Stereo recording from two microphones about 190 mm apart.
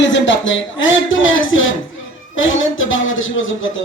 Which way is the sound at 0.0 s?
75° left (ahead or behind).